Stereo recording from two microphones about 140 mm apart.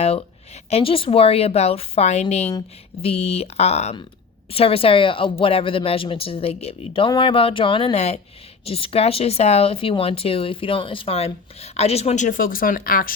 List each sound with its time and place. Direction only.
0.0 s a woman's voice: 45° left (ahead or behind); by 13.1 s 90° left